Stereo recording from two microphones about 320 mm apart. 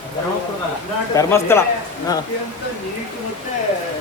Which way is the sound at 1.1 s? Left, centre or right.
Centre.